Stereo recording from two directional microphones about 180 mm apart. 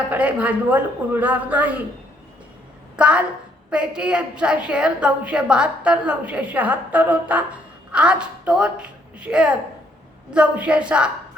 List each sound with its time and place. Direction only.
0.1 s speech: 5° right (ahead or behind)
2.9 s a woman's voice: 5° right (ahead or behind)